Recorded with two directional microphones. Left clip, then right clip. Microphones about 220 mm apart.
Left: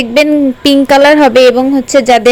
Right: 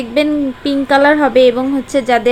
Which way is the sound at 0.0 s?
40° left (ahead or behind).